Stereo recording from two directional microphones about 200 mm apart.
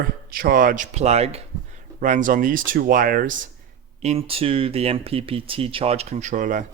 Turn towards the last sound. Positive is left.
turn(degrees=-40)  # may be behind; listen again after turning